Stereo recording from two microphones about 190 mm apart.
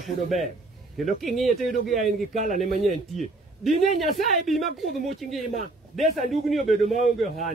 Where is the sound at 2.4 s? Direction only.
45° left (ahead or behind).